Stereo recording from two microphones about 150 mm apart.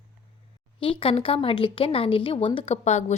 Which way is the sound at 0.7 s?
35° left (ahead or behind).